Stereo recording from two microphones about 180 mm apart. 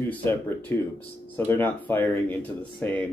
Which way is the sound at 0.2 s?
10° left (ahead or behind).